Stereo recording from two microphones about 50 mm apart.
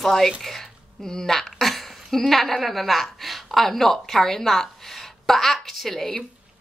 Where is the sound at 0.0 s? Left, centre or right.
Centre.